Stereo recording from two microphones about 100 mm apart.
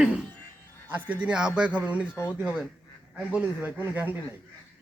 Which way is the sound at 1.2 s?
10° right (ahead or behind).